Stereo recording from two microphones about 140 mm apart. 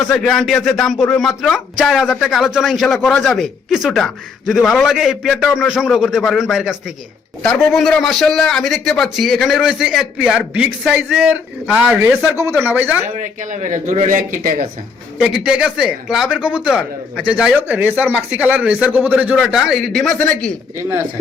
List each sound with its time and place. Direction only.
0.0 s a man's voice: centre (ahead or behind)
13.1 s a man's voice: 60° right (ahead or behind)
15.2 s a man's voice: 5° right (ahead or behind)